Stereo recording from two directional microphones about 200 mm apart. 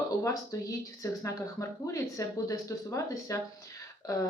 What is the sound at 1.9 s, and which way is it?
Speech, 15° left (ahead or behind).